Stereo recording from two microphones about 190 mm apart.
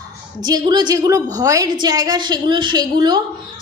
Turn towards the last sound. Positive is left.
turn(degrees=-20)  # may be behind; listen again after turning